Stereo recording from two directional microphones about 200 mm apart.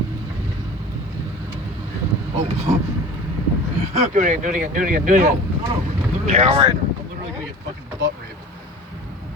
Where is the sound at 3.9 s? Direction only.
35° right (ahead or behind).